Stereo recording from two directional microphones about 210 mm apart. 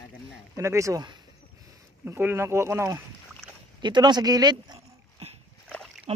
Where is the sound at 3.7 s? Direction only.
20° right (ahead or behind).